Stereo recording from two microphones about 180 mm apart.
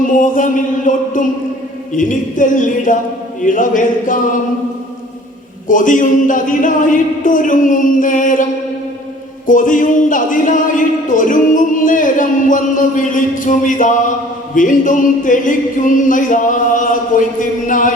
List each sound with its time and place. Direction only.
0.0 s speech: 45° left (ahead or behind)
5.6 s speech: 45° left (ahead or behind)
9.5 s speech: 45° left (ahead or behind)